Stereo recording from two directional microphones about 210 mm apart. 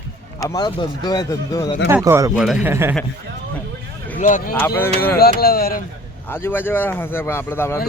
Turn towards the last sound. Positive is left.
turn(degrees=10)  # may be behind; listen again after turning